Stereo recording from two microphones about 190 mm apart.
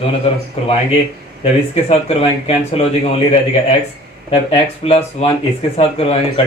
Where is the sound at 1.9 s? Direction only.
30° left (ahead or behind).